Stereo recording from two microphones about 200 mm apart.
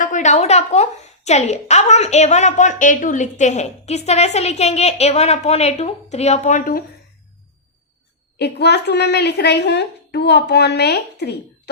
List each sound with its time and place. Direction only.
0.0 s a woman's voice: 40° left (ahead or behind)
8.4 s a woman's voice: 55° left (ahead or behind)